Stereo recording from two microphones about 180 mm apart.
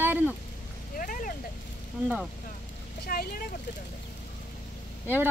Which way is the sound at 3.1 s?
55° left (ahead or behind).